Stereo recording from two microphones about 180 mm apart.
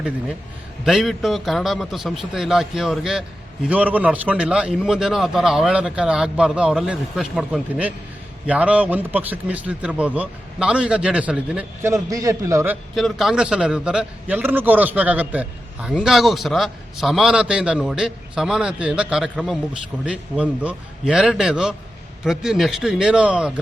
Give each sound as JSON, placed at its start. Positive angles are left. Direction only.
{"t": 0.9, "sound": "a man's voice", "side_deg": 0}
{"t": 13.0, "sound": "a man's voice", "side_deg": 0}
{"t": 15.9, "sound": "a man's voice", "side_deg": 5}